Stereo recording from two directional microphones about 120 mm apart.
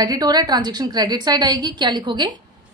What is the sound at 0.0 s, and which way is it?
A woman's voice, 30° right (ahead or behind).